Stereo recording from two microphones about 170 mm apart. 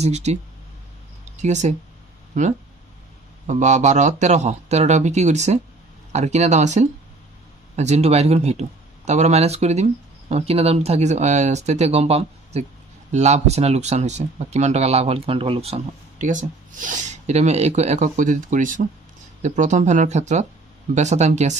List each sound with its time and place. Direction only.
0.0 s speech: 40° right (ahead or behind)
3.4 s speech: 45° right (ahead or behind)